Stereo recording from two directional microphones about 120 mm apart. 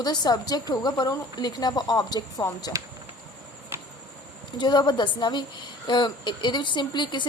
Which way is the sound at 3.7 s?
20° right (ahead or behind).